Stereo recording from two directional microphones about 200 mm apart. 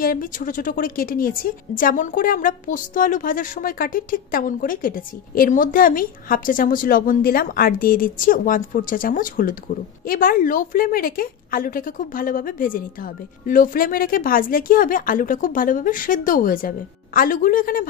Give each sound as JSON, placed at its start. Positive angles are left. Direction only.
{"t": 0.0, "sound": "a woman's voice", "side_deg": 45}